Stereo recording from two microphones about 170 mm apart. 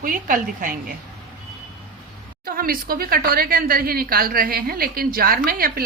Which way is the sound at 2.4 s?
60° right (ahead or behind).